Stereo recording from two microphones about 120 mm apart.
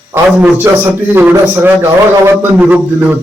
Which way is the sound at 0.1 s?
20° right (ahead or behind).